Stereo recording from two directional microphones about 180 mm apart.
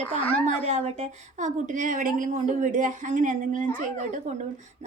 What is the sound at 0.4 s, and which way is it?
A woman's voice, 40° right (ahead or behind).